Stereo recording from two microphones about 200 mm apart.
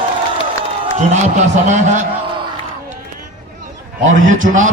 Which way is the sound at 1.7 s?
35° right (ahead or behind).